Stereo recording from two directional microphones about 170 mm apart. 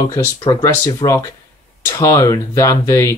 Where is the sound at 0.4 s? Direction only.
25° left (ahead or behind).